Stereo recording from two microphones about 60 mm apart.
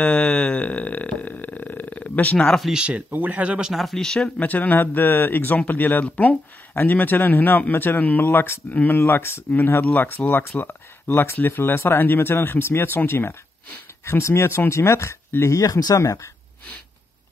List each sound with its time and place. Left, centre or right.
0.0 s a sound: centre
2.3 s speech: centre
2.7 s speech: centre
3.7 s speech: centre
4.4 s speech: left
15.6 s speech: left